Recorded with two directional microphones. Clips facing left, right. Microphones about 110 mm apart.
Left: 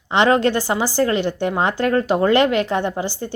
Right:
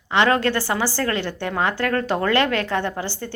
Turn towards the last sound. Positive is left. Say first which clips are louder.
# left 4 dB
turn(degrees=15)  # may be behind; listen again after turning